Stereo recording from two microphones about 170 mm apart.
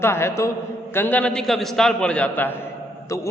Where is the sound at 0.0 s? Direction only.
15° left (ahead or behind).